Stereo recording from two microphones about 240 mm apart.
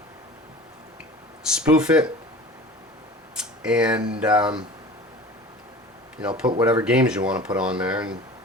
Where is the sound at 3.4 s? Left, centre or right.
Centre.